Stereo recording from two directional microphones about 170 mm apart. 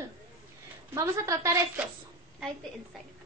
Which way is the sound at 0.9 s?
15° right (ahead or behind).